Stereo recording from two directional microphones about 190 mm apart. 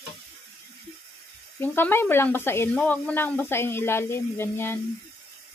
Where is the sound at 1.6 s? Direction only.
10° left (ahead or behind).